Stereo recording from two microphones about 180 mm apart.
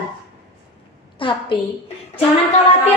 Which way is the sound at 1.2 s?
30° left (ahead or behind).